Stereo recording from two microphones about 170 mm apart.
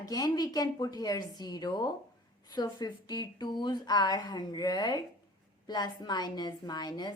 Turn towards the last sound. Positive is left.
turn(degrees=25)  # may be behind; listen again after turning